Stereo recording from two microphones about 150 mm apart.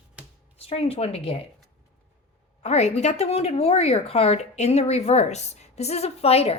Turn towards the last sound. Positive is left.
turn(degrees=40)  # may be behind; listen again after turning